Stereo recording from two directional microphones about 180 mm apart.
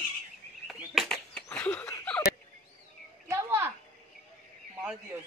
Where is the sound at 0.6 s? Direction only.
Centre (ahead or behind).